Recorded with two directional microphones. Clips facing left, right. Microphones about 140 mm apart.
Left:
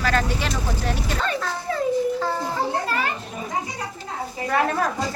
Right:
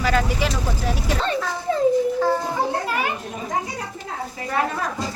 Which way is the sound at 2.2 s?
15° right (ahead or behind).